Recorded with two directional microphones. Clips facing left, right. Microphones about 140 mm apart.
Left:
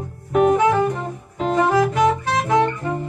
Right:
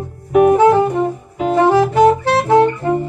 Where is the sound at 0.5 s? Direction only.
30° right (ahead or behind).